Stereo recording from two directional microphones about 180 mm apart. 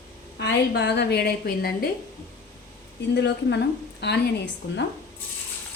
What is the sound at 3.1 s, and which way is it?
A woman's voice, 70° left (ahead or behind).